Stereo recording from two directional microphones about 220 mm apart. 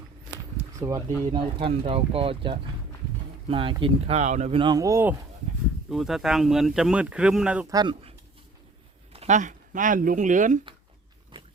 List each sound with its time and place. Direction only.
0.8 s speech: 15° right (ahead or behind)
5.9 s speech: centre (ahead or behind)
7.7 s speech: 20° right (ahead or behind)
9.1 s speech: 35° right (ahead or behind)